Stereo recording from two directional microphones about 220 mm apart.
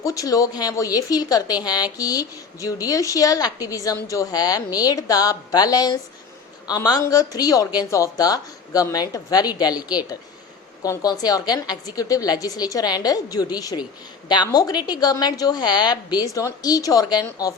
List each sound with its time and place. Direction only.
0.0 s a woman's voice: 15° left (ahead or behind)